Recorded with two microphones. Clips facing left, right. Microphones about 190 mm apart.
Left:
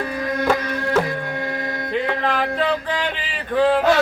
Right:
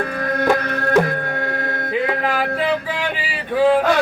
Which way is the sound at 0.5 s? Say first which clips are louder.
Right 2 dB; 55° right (ahead or behind).